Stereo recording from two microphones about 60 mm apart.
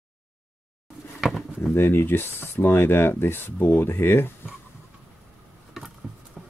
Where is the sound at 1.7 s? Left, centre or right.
Left.